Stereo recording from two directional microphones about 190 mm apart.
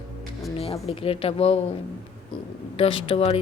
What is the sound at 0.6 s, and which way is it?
Speech, 30° left (ahead or behind).